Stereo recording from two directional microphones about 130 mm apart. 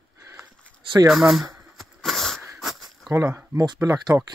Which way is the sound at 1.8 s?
Centre (ahead or behind).